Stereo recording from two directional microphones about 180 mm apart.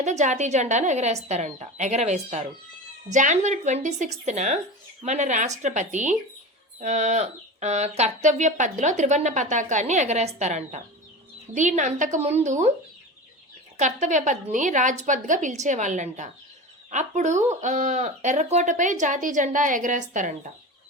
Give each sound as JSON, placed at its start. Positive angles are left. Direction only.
{"t": 0.0, "sound": "speech", "side_deg": -40}
{"t": 13.7, "sound": "speech", "side_deg": -40}